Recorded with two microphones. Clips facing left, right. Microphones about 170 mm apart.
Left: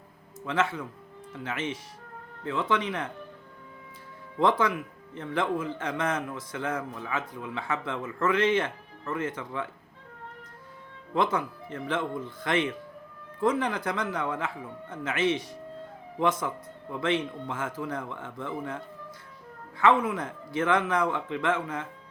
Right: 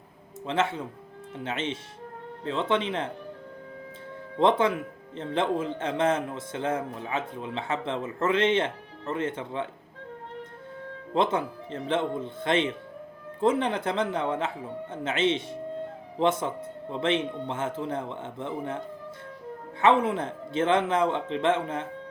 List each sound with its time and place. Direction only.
0.4 s speech: 25° right (ahead or behind)
4.4 s speech: 25° right (ahead or behind)
11.1 s speech: 25° right (ahead or behind)
19.8 s speech: 25° right (ahead or behind)